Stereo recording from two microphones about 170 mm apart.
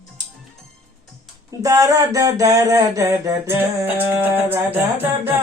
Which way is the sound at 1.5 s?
20° right (ahead or behind).